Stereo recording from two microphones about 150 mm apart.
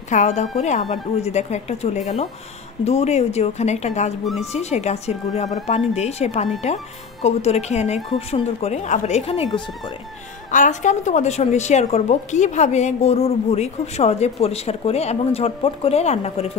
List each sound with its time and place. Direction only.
0.1 s a woman's voice: 50° left (ahead or behind)
10.5 s a woman's voice: 55° left (ahead or behind)